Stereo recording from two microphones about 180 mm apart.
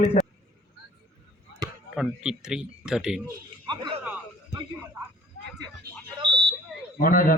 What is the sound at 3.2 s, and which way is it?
Speech, 25° right (ahead or behind).